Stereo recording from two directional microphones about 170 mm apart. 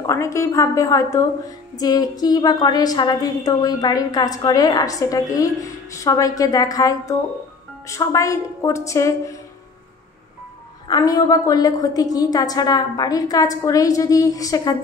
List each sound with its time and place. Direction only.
0.0 s a woman's voice: 20° left (ahead or behind)
10.9 s a woman's voice: 20° left (ahead or behind)